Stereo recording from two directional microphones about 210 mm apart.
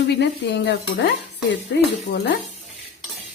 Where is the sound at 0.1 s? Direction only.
55° left (ahead or behind).